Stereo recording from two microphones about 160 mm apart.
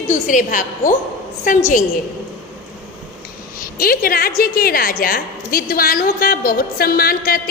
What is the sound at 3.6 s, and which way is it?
A woman's voice, 65° left (ahead or behind).